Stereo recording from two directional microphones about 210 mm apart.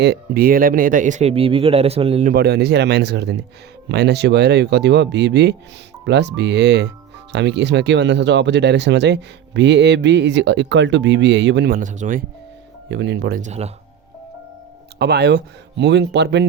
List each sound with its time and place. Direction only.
0.0 s speech: 50° right (ahead or behind); by 2.3 s 30° right (ahead or behind)
2.3 s speech: 50° right (ahead or behind)
12.9 s speech: 55° right (ahead or behind); by 13.7 s 35° right (ahead or behind)
14.9 s speech: 50° right (ahead or behind)